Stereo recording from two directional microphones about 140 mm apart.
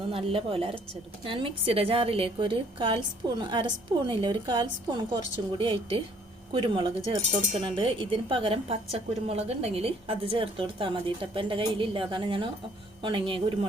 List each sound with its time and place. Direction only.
0.1 s a woman's voice: 40° right (ahead or behind)